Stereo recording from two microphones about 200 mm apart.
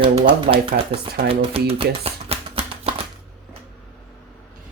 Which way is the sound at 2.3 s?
30° right (ahead or behind).